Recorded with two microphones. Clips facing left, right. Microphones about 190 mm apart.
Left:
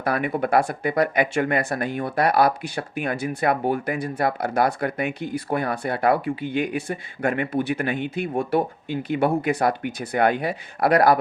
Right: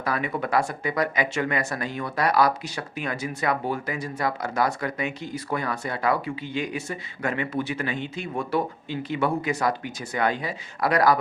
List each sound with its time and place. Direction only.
0.0 s speech: 55° left (ahead or behind)